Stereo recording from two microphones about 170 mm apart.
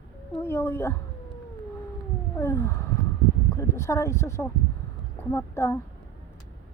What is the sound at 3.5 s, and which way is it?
Speech, 15° left (ahead or behind).